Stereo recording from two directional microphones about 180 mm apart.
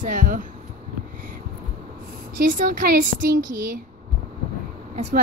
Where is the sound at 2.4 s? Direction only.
50° right (ahead or behind).